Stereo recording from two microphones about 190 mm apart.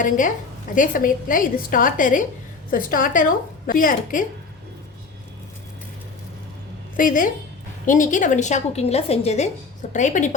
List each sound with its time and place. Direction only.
0.0 s a woman's voice: 45° left (ahead or behind)
6.9 s a woman's voice: 45° left (ahead or behind)